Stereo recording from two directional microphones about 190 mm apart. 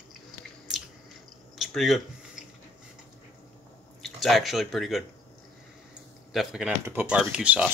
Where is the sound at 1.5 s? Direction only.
Centre (ahead or behind).